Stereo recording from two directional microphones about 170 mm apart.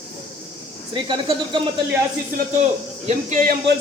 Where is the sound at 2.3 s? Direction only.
45° right (ahead or behind).